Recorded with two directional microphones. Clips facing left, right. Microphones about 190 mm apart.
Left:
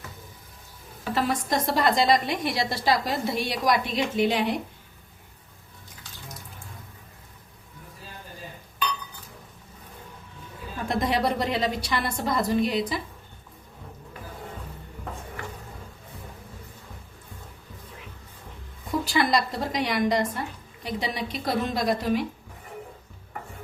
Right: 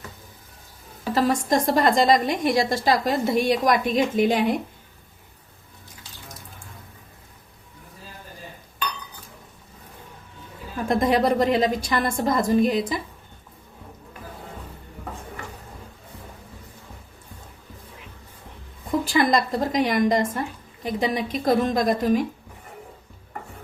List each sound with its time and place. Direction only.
1.1 s a woman's voice: 45° right (ahead or behind)
10.8 s a woman's voice: 50° right (ahead or behind)
19.1 s a woman's voice: 45° right (ahead or behind)